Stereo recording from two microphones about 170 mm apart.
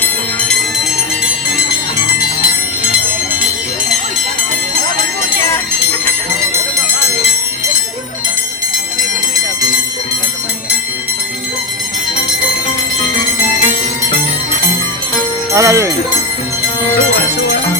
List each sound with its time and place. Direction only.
0.0 s music: 10° left (ahead or behind)
13.4 s music: 55° left (ahead or behind)
15.5 s speech: 15° right (ahead or behind)
17.2 s music: 65° left (ahead or behind)